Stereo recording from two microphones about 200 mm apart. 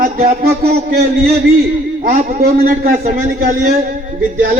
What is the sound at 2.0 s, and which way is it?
A man's voice, 45° right (ahead or behind).